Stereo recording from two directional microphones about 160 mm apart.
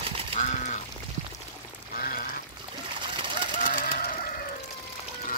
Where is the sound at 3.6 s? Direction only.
55° left (ahead or behind).